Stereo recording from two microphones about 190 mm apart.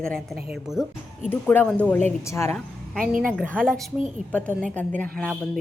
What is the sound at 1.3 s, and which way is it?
Speech, 10° left (ahead or behind).